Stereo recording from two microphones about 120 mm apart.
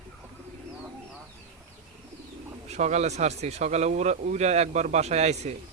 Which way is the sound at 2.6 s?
70° right (ahead or behind).